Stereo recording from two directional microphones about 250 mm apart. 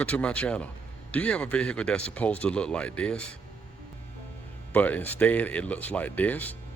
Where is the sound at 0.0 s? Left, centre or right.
Centre.